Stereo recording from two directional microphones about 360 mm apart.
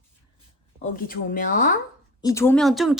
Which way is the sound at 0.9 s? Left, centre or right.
Left.